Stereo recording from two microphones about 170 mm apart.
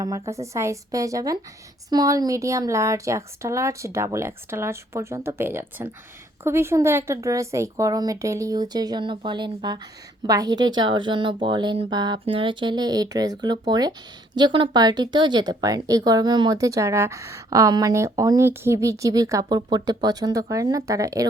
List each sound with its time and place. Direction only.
0.0 s a woman's voice: 20° right (ahead or behind)